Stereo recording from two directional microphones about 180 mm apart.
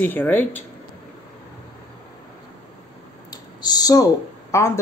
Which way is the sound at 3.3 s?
20° left (ahead or behind).